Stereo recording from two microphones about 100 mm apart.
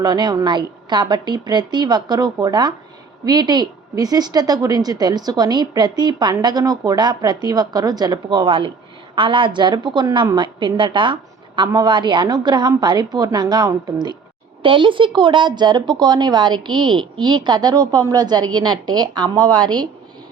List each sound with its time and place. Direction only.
0.0 s a woman's voice: 45° right (ahead or behind)
14.6 s a woman's voice: 55° right (ahead or behind)